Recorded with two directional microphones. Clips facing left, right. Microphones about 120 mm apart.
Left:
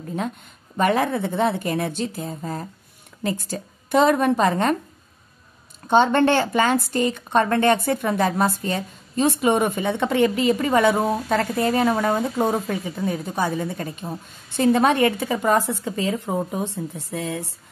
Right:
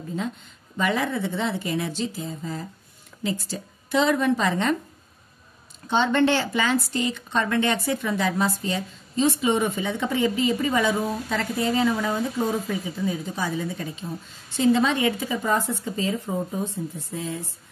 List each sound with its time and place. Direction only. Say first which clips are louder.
0.7 s a woman's voice: left 5 dB; 55° left (ahead or behind)
5.9 s a woman's voice: left 4 dB; 50° left (ahead or behind); by 16.2 s 75° left (ahead or behind)
16.3 s speech: left 3 dB; 85° left